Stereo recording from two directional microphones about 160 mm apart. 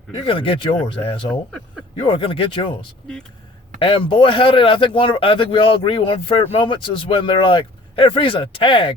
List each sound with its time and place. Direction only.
0.1 s a man's voice: 35° left (ahead or behind)
3.8 s a man's voice: 35° left (ahead or behind)